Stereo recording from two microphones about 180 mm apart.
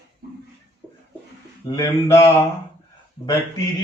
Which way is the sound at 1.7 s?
15° left (ahead or behind).